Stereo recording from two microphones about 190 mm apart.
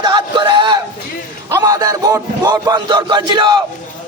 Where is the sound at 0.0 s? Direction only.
25° right (ahead or behind).